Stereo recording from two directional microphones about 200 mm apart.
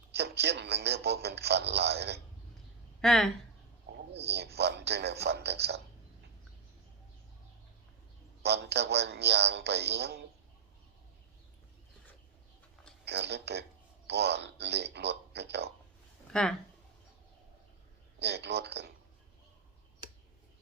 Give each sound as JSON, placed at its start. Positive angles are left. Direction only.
{"t": 0.1, "sound": "a sound", "side_deg": -55}
{"t": 3.0, "sound": "speech", "side_deg": 5}
{"t": 4.3, "sound": "speech", "side_deg": -55}
{"t": 8.4, "sound": "speech", "side_deg": -55}
{"t": 13.1, "sound": "speech", "side_deg": -55}
{"t": 16.3, "sound": "speech", "side_deg": 5}
{"t": 18.2, "sound": "speech", "side_deg": -55}